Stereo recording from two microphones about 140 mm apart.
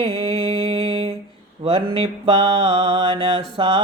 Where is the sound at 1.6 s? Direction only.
40° right (ahead or behind).